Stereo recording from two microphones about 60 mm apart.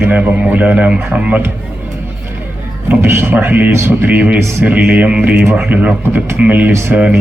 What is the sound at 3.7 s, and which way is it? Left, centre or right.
Speech, right.